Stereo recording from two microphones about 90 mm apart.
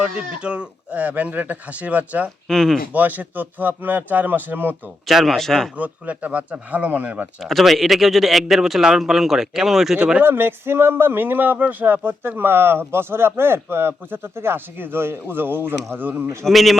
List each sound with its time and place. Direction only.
0.0 s speech: 10° right (ahead or behind)
2.5 s speech: 5° left (ahead or behind)
2.9 s speech: 20° right (ahead or behind)
5.0 s speech: centre (ahead or behind)
5.7 s speech: 15° right (ahead or behind)
7.4 s speech: centre (ahead or behind)
10.2 s speech: 20° right (ahead or behind)
16.4 s speech: centre (ahead or behind)